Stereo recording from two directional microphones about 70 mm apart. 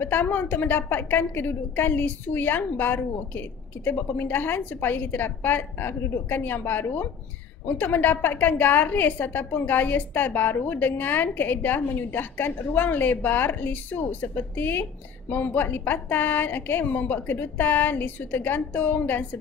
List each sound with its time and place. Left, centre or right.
0.0 s a woman's voice: left